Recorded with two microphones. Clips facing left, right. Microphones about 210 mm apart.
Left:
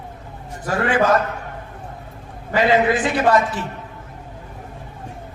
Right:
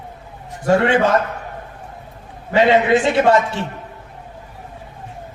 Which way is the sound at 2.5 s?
25° right (ahead or behind).